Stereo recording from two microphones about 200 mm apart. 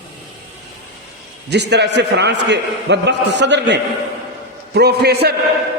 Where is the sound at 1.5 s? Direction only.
60° right (ahead or behind).